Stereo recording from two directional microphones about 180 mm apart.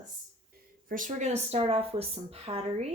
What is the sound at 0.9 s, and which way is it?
Speech, 45° right (ahead or behind).